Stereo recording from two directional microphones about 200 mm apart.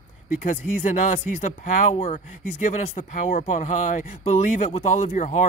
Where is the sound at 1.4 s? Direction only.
35° left (ahead or behind).